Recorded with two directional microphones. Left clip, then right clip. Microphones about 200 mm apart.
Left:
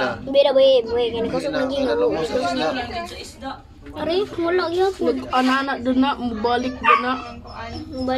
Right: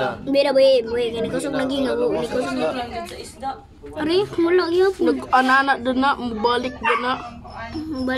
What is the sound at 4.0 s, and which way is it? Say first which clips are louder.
Speech: right 2 dB; 40° right (ahead or behind).